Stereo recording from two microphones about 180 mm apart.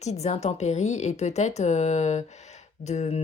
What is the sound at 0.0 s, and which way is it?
Speech, 40° left (ahead or behind).